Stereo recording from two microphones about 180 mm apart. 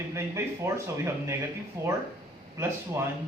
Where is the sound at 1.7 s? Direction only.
15° right (ahead or behind).